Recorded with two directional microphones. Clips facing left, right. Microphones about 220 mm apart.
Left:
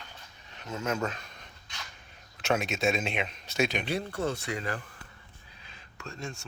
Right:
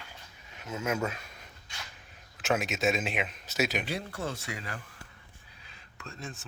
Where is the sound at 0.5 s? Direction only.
5° right (ahead or behind).